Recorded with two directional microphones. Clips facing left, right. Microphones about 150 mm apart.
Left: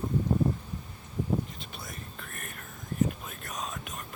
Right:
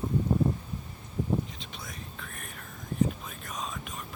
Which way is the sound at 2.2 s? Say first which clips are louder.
Even; centre (ahead or behind).